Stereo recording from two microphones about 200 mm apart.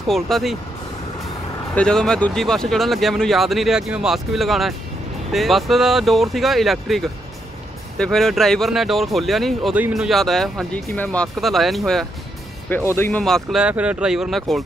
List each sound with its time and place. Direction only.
0.1 s speech: centre (ahead or behind)
1.8 s speech: 5° left (ahead or behind)